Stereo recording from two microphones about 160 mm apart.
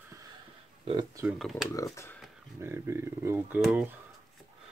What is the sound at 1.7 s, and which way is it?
Speech, 20° left (ahead or behind).